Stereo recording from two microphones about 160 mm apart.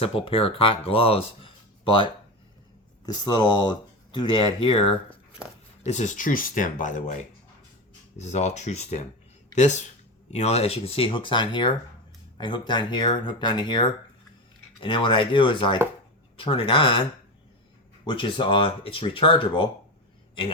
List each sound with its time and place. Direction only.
0.0 s speech: 35° left (ahead or behind)
3.1 s speech: 25° left (ahead or behind); by 7.2 s 50° left (ahead or behind)
8.2 s speech: 45° left (ahead or behind)